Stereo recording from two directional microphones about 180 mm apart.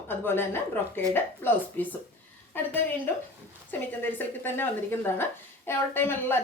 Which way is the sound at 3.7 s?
10° left (ahead or behind).